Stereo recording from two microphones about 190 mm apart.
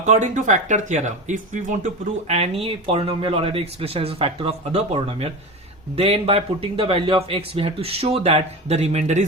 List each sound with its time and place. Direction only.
0.0 s speech: 40° right (ahead or behind)